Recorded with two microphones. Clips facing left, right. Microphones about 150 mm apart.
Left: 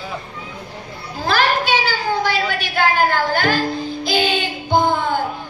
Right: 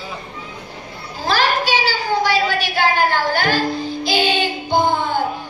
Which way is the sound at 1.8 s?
50° left (ahead or behind).